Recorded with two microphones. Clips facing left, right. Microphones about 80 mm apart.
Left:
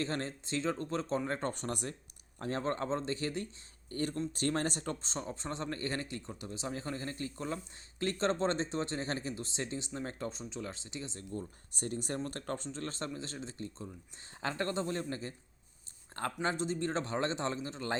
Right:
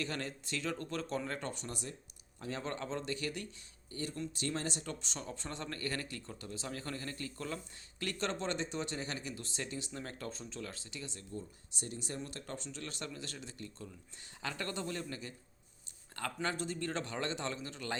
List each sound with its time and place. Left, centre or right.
0.0 s speech: left
2.4 s speech: left
3.9 s speech: left
11.3 s speech: left